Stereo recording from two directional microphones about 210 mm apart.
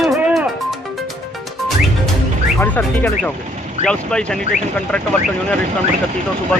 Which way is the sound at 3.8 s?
5° left (ahead or behind).